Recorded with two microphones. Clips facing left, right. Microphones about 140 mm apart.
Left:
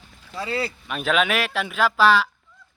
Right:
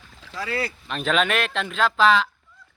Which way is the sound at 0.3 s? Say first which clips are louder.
Left 1 dB; 25° left (ahead or behind).